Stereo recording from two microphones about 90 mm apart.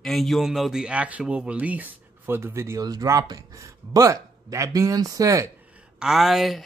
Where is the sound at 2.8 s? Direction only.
40° right (ahead or behind).